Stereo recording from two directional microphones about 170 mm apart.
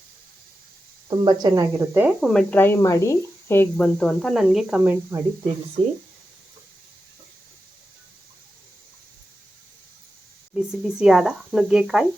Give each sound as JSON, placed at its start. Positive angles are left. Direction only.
{"t": 1.2, "sound": "speech", "side_deg": -25}
{"t": 2.2, "sound": "speech", "side_deg": 5}
{"t": 4.0, "sound": "speech", "side_deg": 0}
{"t": 5.8, "sound": "speech", "side_deg": -35}
{"t": 10.5, "sound": "speech", "side_deg": -5}